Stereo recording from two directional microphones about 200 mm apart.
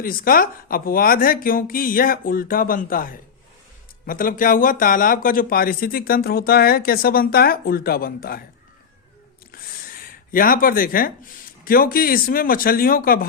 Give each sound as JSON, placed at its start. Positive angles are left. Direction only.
{"t": 0.0, "sound": "speech", "side_deg": 45}
{"t": 9.5, "sound": "speech", "side_deg": 45}